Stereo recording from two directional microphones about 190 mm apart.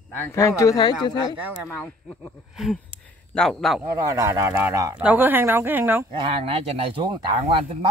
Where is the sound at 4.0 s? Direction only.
15° right (ahead or behind).